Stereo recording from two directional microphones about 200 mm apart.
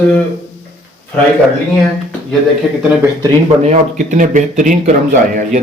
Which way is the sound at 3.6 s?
35° right (ahead or behind).